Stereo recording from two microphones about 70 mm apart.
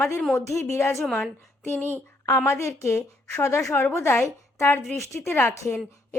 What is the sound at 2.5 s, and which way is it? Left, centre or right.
A woman's voice, left.